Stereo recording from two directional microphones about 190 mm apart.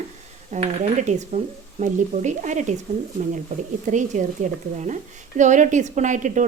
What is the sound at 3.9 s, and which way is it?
Sizzle, 40° right (ahead or behind).